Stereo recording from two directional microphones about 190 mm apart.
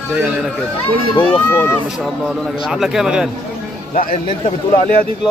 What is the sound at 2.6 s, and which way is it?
Speech, centre (ahead or behind).